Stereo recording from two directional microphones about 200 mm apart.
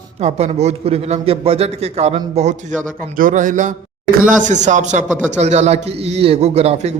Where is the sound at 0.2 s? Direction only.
35° right (ahead or behind).